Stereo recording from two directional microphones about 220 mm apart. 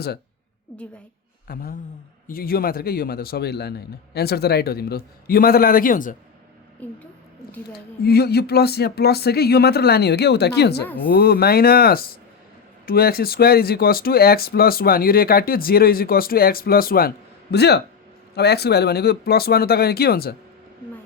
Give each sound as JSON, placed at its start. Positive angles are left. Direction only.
{"t": 1.5, "sound": "a sound", "side_deg": 40}
{"t": 2.2, "sound": "speech", "side_deg": 40}
{"t": 6.8, "sound": "a woman's voice", "side_deg": 5}
{"t": 7.7, "sound": "speech", "side_deg": 45}